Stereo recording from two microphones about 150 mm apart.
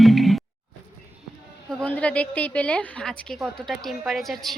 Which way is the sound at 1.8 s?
10° left (ahead or behind).